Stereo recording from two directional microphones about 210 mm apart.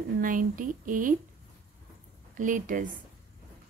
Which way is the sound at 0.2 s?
40° right (ahead or behind).